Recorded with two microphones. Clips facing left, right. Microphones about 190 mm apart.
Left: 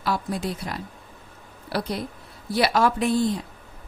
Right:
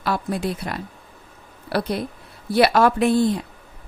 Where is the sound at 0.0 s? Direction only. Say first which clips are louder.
Right 3 dB; 60° right (ahead or behind).